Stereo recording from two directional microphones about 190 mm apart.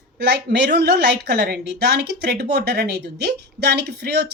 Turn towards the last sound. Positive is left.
turn(degrees=-60)  # may be behind; listen again after turning